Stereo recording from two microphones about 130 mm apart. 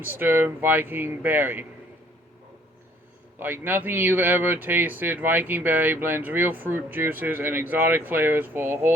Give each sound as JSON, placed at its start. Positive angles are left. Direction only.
{"t": 0.0, "sound": "speech", "side_deg": -15}
{"t": 3.4, "sound": "speech", "side_deg": -15}